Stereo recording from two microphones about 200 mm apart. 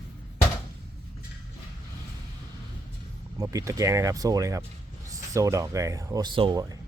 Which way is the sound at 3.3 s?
15° right (ahead or behind).